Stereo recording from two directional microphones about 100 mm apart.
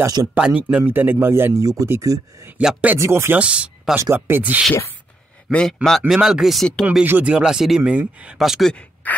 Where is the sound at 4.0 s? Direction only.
25° right (ahead or behind).